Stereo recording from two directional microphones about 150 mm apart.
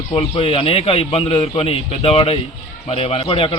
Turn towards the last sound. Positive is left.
turn(degrees=35)  # may be behind; listen again after turning